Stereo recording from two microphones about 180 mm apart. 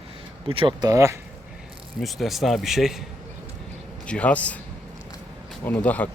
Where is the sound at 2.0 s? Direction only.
Centre (ahead or behind).